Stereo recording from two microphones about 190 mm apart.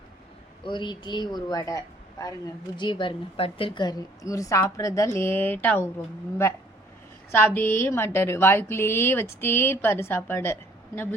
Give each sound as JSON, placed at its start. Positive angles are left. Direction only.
{"t": 0.6, "sound": "a woman's voice", "side_deg": 25}